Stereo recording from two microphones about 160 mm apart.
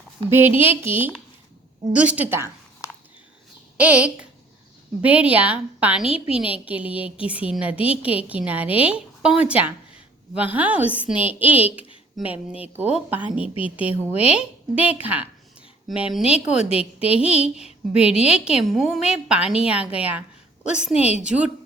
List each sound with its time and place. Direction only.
0.3 s a woman's voice: 15° right (ahead or behind)
3.8 s a woman's voice: 10° right (ahead or behind)
6.2 s a woman's voice: 35° left (ahead or behind)
6.5 s a woman's voice: 10° right (ahead or behind)
20.9 s a woman's voice: 40° left (ahead or behind)
21.2 s a woman's voice: 5° right (ahead or behind)